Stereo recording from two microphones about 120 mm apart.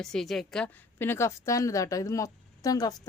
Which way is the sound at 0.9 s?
20° left (ahead or behind).